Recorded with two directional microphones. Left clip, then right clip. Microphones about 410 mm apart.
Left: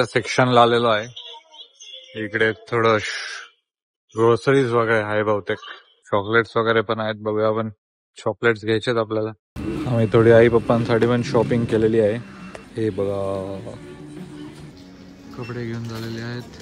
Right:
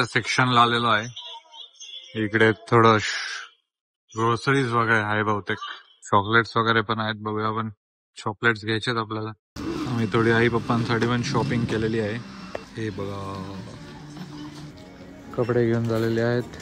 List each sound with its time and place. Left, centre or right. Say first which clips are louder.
0.0 s speech: left 3 dB; centre
2.1 s a man's voice: right 1 dB; centre
13.1 s speech: left 10 dB; left
15.4 s speech: right 9 dB; centre